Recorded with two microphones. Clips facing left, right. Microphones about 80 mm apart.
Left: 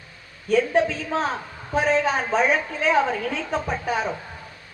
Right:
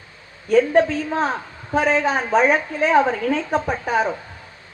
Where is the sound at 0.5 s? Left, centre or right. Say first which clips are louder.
Right 4 dB; right.